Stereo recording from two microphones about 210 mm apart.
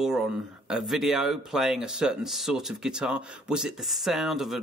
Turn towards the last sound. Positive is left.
turn(degrees=0)  # may be behind; listen again after turning